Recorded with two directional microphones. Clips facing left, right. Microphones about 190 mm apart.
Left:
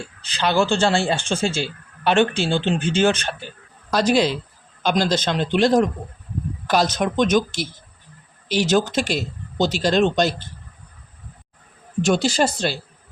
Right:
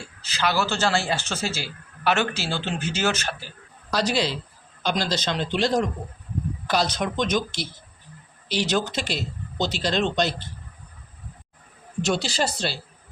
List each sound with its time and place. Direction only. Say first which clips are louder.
0.3 s a man's voice: left 5 dB; 30° left (ahead or behind)
3.9 s speech: left 6 dB; 50° left (ahead or behind)
12.0 s speech: left 6 dB; 50° left (ahead or behind)